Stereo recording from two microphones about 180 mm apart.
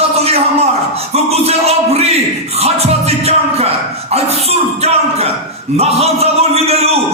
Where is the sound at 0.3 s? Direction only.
35° right (ahead or behind).